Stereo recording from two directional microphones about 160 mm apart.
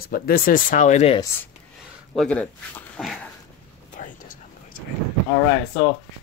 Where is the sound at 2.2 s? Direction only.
5° left (ahead or behind).